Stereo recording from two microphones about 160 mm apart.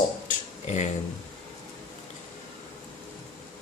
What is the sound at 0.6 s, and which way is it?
Speech, 45° left (ahead or behind).